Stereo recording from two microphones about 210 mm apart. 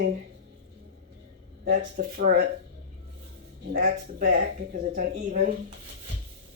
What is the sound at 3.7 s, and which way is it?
Speech, 45° right (ahead or behind).